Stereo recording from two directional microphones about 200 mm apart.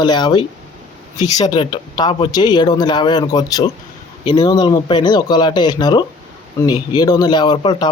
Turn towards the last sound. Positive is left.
turn(degrees=20)  # may be behind; listen again after turning